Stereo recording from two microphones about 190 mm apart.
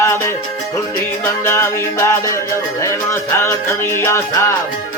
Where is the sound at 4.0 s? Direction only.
15° left (ahead or behind).